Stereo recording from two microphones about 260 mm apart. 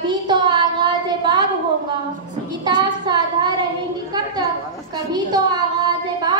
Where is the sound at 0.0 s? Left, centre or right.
Centre.